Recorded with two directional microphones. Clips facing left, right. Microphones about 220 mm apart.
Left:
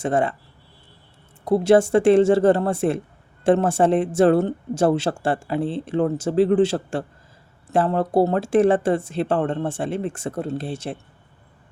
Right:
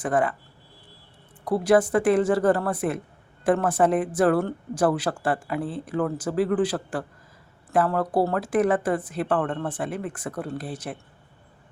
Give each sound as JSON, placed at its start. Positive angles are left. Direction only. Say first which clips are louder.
{"t": 0.0, "sound": "speech", "louder": "left 2 dB", "side_deg": 25}
{"t": 1.5, "sound": "speech", "louder": "left 4 dB", "side_deg": 25}